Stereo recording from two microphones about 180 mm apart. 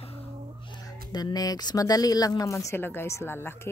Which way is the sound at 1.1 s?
20° left (ahead or behind).